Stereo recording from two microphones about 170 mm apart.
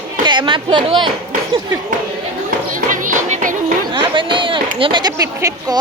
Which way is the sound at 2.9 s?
50° right (ahead or behind).